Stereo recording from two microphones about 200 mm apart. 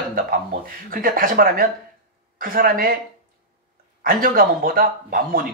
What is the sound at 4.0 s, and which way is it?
Speech, 45° right (ahead or behind).